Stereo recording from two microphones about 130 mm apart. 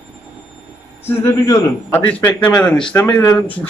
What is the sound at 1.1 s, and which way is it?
Speech, 15° left (ahead or behind).